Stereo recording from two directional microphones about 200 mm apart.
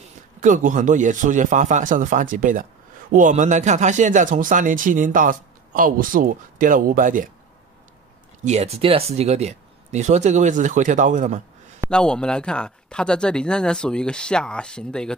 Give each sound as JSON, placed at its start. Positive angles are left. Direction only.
{"t": 0.4, "sound": "speech", "side_deg": -40}
{"t": 8.5, "sound": "speech", "side_deg": -30}
{"t": 11.9, "sound": "speech", "side_deg": 5}